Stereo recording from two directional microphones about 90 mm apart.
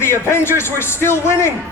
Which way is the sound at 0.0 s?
30° left (ahead or behind).